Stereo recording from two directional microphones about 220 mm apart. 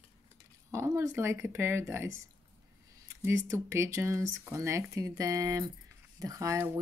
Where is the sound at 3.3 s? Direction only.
10° right (ahead or behind).